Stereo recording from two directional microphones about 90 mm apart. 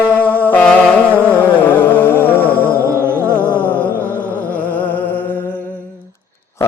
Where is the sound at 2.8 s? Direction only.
25° right (ahead or behind).